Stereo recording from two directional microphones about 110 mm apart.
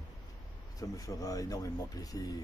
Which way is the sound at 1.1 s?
30° left (ahead or behind).